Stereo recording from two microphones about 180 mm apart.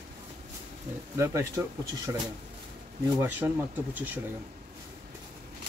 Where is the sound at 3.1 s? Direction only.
10° right (ahead or behind).